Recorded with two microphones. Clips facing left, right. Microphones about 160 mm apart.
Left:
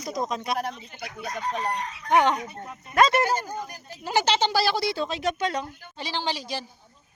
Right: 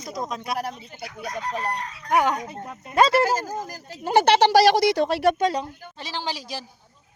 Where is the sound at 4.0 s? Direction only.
50° right (ahead or behind).